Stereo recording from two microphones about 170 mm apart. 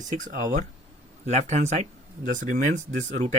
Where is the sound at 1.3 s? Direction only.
40° right (ahead or behind).